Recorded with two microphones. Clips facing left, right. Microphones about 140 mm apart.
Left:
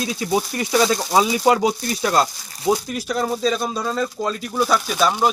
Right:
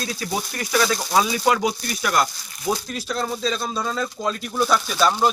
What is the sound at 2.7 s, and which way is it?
Speech, 15° left (ahead or behind).